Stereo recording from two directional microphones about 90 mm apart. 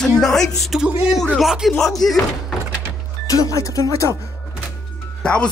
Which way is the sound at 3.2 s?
40° left (ahead or behind).